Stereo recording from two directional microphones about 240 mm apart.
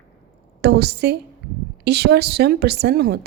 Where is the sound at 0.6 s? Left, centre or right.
Right.